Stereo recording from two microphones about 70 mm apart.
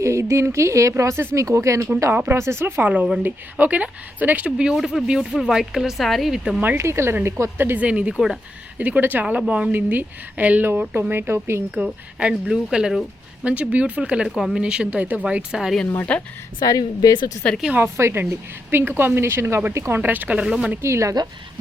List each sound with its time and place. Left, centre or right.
0.0 s speech: right
1.5 s speech: right
2.8 s a woman's voice: right
4.7 s speech: centre
6.7 s speech: right
7.8 s a woman's voice: centre
12.2 s speech: centre
13.4 s a woman's voice: centre
16.1 s speech: centre
16.6 s speech: left
17.9 s speech: right
20.4 s speech: centre
20.8 s speech: right